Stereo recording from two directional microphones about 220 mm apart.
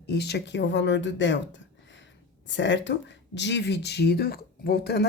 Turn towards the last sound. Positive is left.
turn(degrees=45)  # may be behind; listen again after turning